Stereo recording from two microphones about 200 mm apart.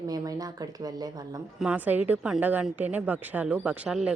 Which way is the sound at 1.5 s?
5° right (ahead or behind).